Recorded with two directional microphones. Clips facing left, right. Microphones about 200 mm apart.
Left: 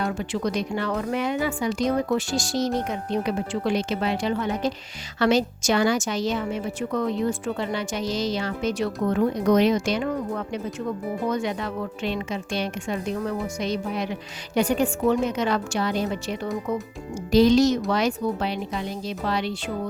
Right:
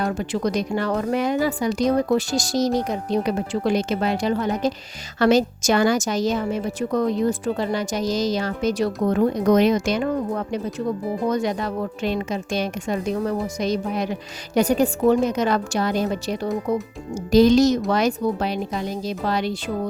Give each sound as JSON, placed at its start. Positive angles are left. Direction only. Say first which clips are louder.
{"t": 0.0, "sound": "a woman's voice", "louder": "right 3 dB", "side_deg": -40}